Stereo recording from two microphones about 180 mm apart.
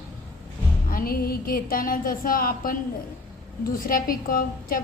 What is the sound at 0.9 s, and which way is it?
A woman's voice, 55° left (ahead or behind).